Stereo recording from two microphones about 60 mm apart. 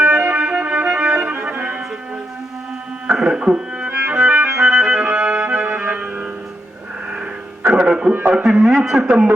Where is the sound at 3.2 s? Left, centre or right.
Centre.